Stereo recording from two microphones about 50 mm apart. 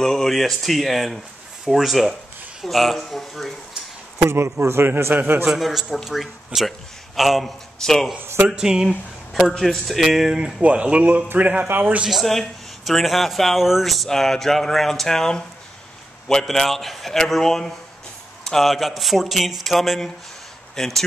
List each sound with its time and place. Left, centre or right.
0.0 s speech: centre
4.3 s speech: right
4.8 s a man's voice: right
5.4 s a man's voice: centre
8.5 s a man's voice: centre
9.6 s speech: centre
10.6 s speech: right
11.6 s a man's voice: right
12.1 s speech: centre